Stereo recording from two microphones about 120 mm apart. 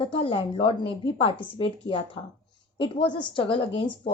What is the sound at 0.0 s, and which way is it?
Speech, 50° left (ahead or behind).